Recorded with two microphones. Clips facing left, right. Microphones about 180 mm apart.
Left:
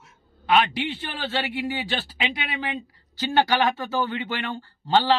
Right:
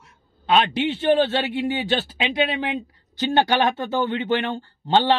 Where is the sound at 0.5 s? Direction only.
25° right (ahead or behind).